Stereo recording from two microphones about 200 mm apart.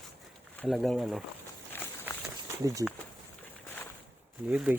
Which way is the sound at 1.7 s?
10° left (ahead or behind).